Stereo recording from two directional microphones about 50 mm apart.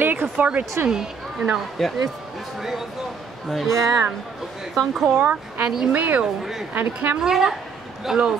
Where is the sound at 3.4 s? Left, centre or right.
Centre.